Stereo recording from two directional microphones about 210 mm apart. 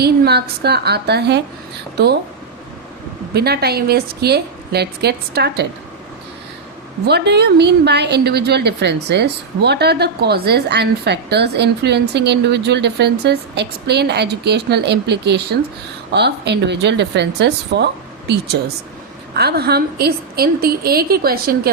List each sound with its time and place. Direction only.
0.0 s a woman's voice: 50° right (ahead or behind)
3.3 s a woman's voice: 50° right (ahead or behind)
7.0 s a woman's voice: 50° right (ahead or behind)
19.4 s a woman's voice: 50° right (ahead or behind)